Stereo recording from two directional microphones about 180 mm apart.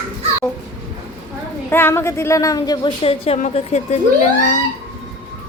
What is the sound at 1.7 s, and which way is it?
A woman's voice, 10° left (ahead or behind).